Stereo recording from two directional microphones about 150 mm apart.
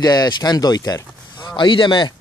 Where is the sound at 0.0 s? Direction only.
25° left (ahead or behind).